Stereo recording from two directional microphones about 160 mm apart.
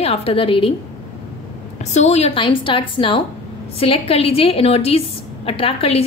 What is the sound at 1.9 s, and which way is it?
A woman's voice, 45° left (ahead or behind).